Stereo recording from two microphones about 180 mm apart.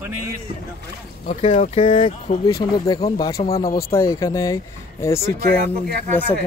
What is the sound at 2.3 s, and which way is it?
Speech, 40° left (ahead or behind).